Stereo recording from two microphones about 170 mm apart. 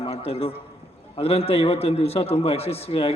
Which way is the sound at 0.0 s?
35° left (ahead or behind).